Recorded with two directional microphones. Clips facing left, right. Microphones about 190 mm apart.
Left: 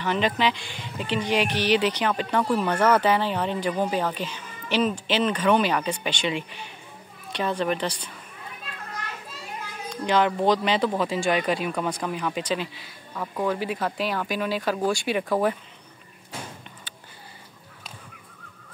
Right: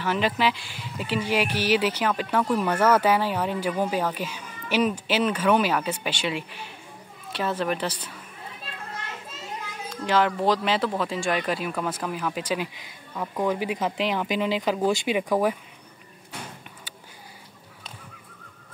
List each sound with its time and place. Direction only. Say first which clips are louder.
0.0 s speech: even; 5° right (ahead or behind)
8.6 s children playing: even; 25° right (ahead or behind)
10.0 s speech: left 1 dB; centre (ahead or behind)